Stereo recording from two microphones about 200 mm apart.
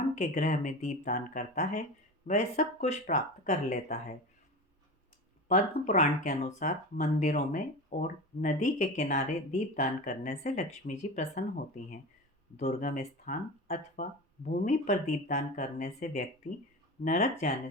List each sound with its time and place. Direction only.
0.2 s speech: 35° left (ahead or behind)
5.5 s speech: 35° left (ahead or behind)